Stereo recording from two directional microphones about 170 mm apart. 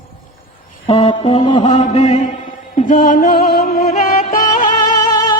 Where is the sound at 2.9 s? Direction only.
55° left (ahead or behind).